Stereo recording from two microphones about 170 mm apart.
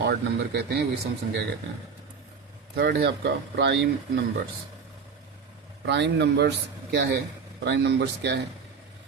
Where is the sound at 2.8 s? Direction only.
70° right (ahead or behind); by 4.2 s 90° right.